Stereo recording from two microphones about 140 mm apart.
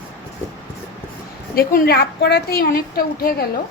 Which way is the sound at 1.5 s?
90° left.